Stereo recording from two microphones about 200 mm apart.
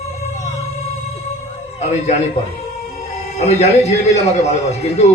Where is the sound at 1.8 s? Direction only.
35° left (ahead or behind).